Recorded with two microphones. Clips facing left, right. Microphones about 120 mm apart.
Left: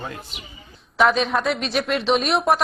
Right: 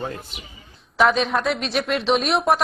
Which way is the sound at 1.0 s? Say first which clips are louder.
Even; centre (ahead or behind).